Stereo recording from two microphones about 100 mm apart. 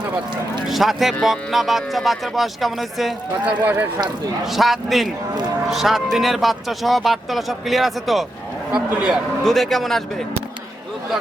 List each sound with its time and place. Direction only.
0.7 s speech: centre (ahead or behind)
3.4 s a man's voice: 15° right (ahead or behind)
4.4 s a man's voice: centre (ahead or behind)
9.4 s speech: 5° left (ahead or behind)